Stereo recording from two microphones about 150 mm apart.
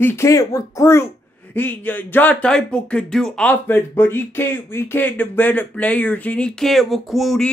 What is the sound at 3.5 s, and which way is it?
Speech, 15° left (ahead or behind).